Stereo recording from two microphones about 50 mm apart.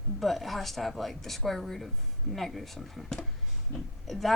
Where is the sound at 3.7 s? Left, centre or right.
Left.